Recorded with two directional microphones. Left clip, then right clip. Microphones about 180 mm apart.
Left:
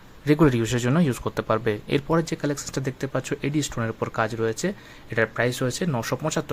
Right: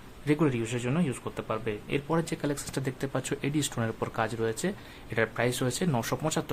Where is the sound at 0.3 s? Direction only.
35° left (ahead or behind).